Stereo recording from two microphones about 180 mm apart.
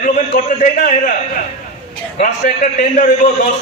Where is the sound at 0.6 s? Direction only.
45° left (ahead or behind).